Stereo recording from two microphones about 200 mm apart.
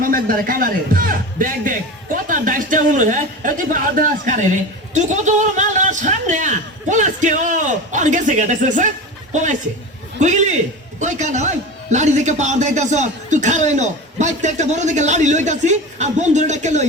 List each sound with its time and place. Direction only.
0.0 s a man's voice: 45° right (ahead or behind)